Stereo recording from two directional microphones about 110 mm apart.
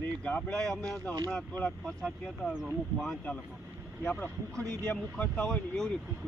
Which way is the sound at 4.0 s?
10° left (ahead or behind).